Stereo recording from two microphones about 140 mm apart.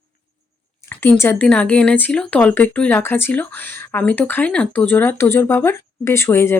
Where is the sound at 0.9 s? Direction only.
15° left (ahead or behind).